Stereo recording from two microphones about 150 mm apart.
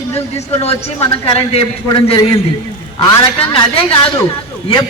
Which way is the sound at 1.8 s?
30° left (ahead or behind).